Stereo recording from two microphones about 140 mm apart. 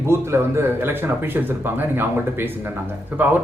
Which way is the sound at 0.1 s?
20° right (ahead or behind).